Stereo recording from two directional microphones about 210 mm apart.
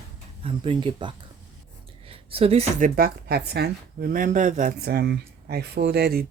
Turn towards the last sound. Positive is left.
turn(degrees=-45)  # may be behind; listen again after turning